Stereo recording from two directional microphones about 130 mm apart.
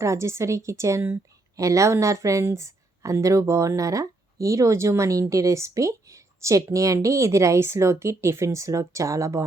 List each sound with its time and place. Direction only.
0.0 s a woman's voice: 20° right (ahead or behind)